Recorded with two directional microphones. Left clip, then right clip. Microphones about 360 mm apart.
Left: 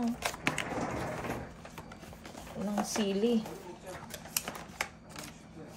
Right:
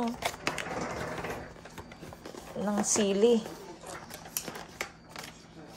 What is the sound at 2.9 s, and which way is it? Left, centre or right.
Speech, right.